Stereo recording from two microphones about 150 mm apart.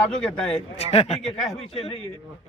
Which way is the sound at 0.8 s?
40° left (ahead or behind).